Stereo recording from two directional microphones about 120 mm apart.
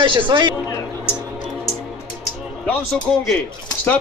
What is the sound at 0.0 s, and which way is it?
Speech, 45° right (ahead or behind).